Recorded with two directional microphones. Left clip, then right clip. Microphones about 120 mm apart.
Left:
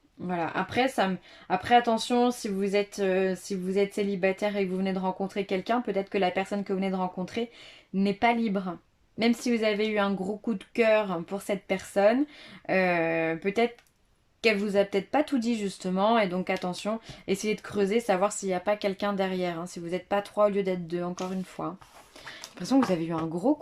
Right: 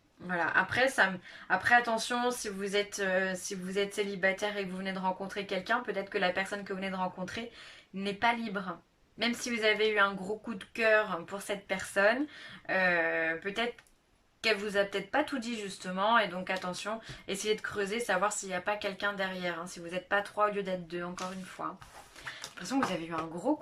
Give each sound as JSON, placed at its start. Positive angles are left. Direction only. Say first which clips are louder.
{"t": 0.3, "sound": "speech", "louder": "right 1 dB", "side_deg": 45}